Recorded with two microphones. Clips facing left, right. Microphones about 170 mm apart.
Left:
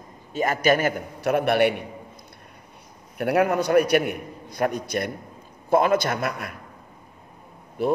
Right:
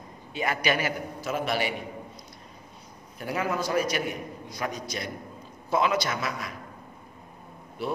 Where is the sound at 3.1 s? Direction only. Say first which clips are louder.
Left 8 dB; 65° left (ahead or behind).